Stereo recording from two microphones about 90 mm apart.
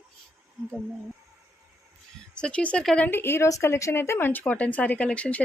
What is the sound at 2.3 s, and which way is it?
A woman's voice, 10° left (ahead or behind).